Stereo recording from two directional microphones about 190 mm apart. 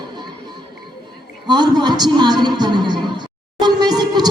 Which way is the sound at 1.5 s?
25° right (ahead or behind).